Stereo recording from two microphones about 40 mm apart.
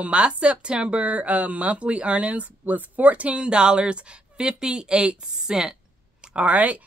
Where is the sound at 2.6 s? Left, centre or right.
Right.